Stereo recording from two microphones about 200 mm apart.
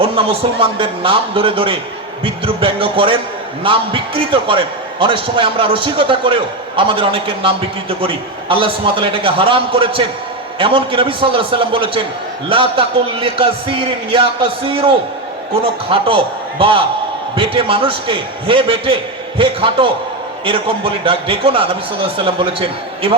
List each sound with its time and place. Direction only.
0.0 s a man's voice: 25° right (ahead or behind)